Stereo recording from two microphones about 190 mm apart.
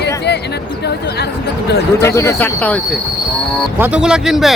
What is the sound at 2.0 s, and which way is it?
Speech, 15° left (ahead or behind).